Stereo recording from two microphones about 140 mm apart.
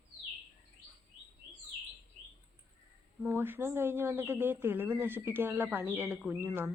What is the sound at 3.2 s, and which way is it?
A woman's voice, 15° right (ahead or behind).